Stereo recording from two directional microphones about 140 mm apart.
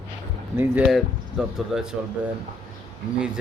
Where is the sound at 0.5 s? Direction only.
15° right (ahead or behind).